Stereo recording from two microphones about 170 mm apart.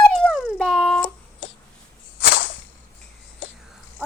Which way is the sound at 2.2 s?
90° left.